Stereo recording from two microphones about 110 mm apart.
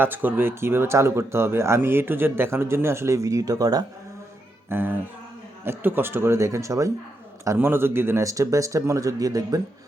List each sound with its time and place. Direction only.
0.0 s speech: 15° right (ahead or behind); by 3.8 s 35° right (ahead or behind)
4.7 s speech: 20° right (ahead or behind); by 9.6 s 35° right (ahead or behind)